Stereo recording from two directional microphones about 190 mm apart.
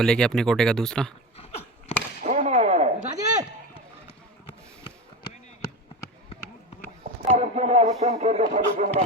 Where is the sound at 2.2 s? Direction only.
40° right (ahead or behind).